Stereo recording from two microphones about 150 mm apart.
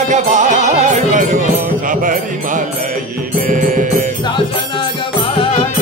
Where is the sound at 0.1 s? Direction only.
55° right (ahead or behind).